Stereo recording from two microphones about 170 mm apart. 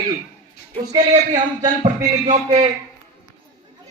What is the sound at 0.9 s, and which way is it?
Speech, 45° right (ahead or behind).